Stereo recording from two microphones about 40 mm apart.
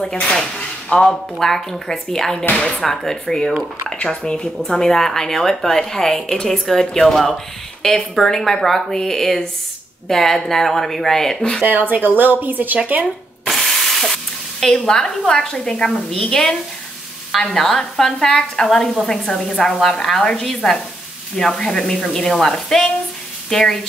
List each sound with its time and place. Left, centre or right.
0.0 s speech: centre
11.6 s speech: right
13.5 s sizzle: centre; by 15.8 s left
15.8 s speech: centre